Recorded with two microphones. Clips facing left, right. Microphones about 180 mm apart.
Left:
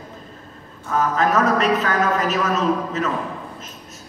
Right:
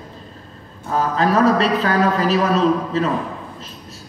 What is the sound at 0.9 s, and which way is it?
A man's voice, 35° right (ahead or behind).